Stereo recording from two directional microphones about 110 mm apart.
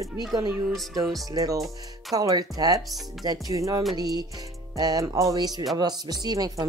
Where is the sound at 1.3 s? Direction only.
30° right (ahead or behind).